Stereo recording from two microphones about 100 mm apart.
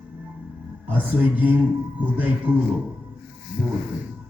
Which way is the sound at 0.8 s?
20° right (ahead or behind).